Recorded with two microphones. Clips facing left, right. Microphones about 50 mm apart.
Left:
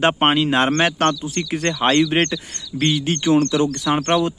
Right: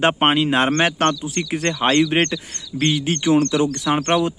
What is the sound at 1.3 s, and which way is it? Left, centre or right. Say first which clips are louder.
Speech: even; right.